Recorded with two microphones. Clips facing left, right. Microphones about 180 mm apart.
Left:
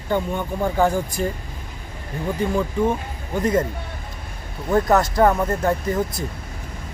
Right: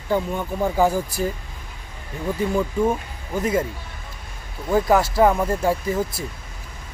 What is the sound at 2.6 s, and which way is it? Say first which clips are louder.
Speech: right 1 dB; 5° right (ahead or behind).